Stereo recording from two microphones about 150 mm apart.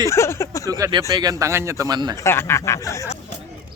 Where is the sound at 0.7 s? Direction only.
25° right (ahead or behind).